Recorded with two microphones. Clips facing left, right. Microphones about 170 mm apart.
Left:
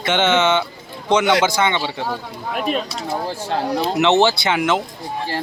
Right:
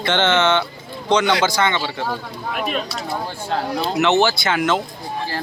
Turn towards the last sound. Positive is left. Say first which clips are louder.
# left 1 dB
turn(degrees=15)  # may be behind; listen again after turning